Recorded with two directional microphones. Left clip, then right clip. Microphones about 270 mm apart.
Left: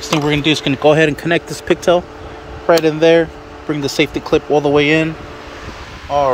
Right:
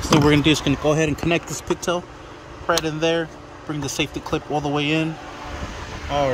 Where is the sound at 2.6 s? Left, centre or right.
Left.